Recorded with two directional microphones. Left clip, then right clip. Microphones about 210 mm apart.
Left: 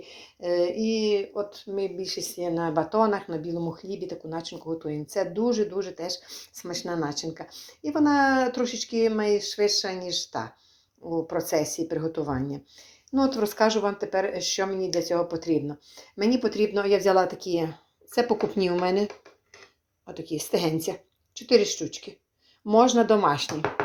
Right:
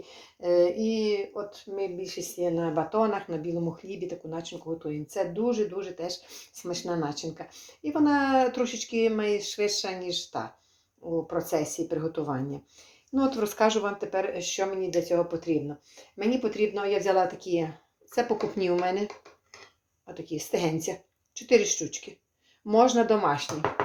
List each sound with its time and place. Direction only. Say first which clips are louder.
0.0 s speech: right 1 dB; 25° left (ahead or behind)
3.8 s speech: left 2 dB; centre (ahead or behind)
4.3 s speech: left 2 dB; 25° left (ahead or behind)
8.6 s speech: left 2 dB; centre (ahead or behind)
8.9 s speech: left 2 dB; 20° left (ahead or behind)
9.4 s speech: left 4 dB; centre (ahead or behind)
9.8 s speech: left 2 dB; 20° left (ahead or behind)